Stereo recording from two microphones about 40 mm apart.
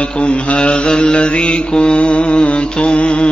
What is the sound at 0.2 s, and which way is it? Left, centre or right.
Mantra, left.